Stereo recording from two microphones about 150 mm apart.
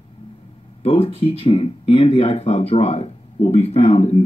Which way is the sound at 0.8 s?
40° left (ahead or behind).